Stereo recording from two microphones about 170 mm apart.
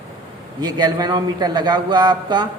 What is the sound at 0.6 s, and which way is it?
A man's voice, 25° right (ahead or behind).